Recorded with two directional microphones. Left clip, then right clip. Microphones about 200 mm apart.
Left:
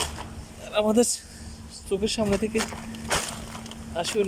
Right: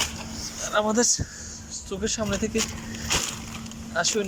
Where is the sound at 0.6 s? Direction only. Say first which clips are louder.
Left 1 dB; 20° left (ahead or behind).